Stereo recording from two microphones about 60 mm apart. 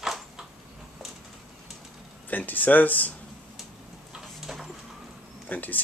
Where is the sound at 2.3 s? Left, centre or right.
Left.